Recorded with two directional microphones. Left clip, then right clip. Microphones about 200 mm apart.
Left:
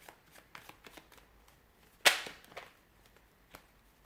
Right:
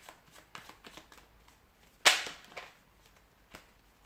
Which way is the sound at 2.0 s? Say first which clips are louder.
Right 2 dB; 15° left (ahead or behind).